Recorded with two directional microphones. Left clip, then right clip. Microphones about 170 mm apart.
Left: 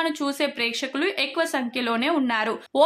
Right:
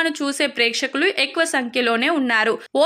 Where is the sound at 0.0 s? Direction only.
15° right (ahead or behind).